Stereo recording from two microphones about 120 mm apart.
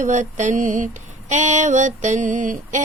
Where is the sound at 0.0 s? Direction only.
90° right.